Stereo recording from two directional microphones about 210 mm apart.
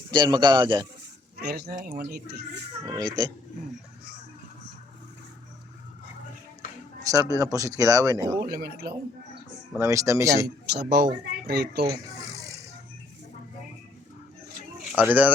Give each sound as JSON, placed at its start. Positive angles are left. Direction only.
{"t": 0.1, "sound": "a man's voice", "side_deg": -20}
{"t": 1.4, "sound": "speech", "side_deg": -50}
{"t": 2.8, "sound": "a man's voice", "side_deg": -20}
{"t": 7.1, "sound": "speech", "side_deg": -15}
{"t": 8.4, "sound": "speech", "side_deg": -45}
{"t": 9.8, "sound": "speech", "side_deg": -15}
{"t": 10.7, "sound": "speech", "side_deg": -50}
{"t": 11.9, "sound": "a sound", "side_deg": -15}
{"t": 14.9, "sound": "speech", "side_deg": -5}